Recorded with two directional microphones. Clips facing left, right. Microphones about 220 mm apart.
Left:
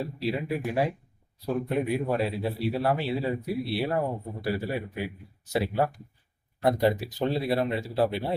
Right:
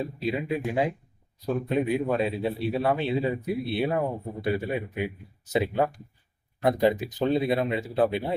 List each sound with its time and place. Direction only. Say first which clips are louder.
0.2 s speech: right 1 dB; 20° right (ahead or behind)